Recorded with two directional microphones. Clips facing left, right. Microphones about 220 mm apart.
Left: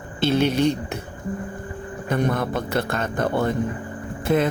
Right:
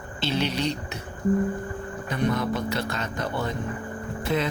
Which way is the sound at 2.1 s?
50° left (ahead or behind).